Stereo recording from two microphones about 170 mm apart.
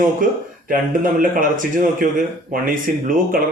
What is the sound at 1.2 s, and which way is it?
Speech, 50° right (ahead or behind).